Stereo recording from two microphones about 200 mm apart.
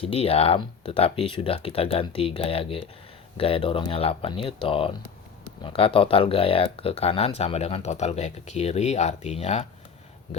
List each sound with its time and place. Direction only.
0.0 s speech: 30° left (ahead or behind)